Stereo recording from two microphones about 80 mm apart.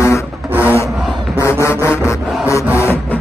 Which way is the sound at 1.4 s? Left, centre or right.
Left.